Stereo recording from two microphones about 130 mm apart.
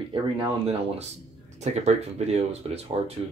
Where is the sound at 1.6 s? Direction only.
60° right (ahead or behind).